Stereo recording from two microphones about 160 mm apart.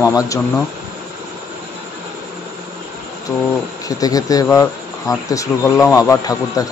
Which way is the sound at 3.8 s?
20° left (ahead or behind).